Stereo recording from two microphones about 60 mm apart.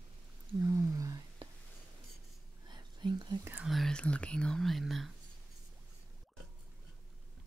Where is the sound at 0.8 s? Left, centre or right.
Right.